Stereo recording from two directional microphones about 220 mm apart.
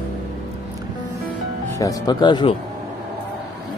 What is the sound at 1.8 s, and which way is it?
Speech, 15° left (ahead or behind).